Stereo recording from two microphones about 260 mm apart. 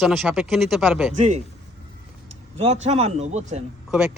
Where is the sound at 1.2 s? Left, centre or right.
Right.